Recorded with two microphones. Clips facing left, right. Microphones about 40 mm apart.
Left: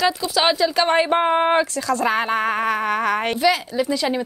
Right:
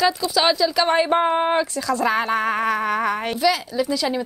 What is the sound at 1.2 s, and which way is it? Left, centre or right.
Speech, left.